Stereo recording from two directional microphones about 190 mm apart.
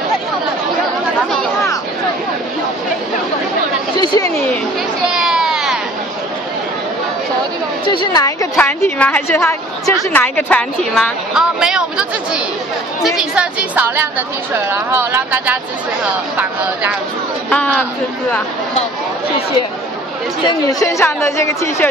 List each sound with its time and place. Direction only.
4.0 s a sound: 20° left (ahead or behind)
5.1 s a sound: 5° right (ahead or behind)
7.8 s a woman's voice: 25° left (ahead or behind)
8.5 s a woman's voice: 10° left (ahead or behind); by 16.9 s 10° right (ahead or behind)
17.5 s a woman's voice: 5° left (ahead or behind)
20.4 s a woman's voice: 15° left (ahead or behind)